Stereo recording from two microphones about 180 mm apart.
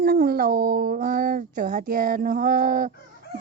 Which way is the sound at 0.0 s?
60° right (ahead or behind).